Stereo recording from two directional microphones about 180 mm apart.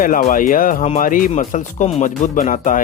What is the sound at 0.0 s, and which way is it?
Speech, 50° left (ahead or behind).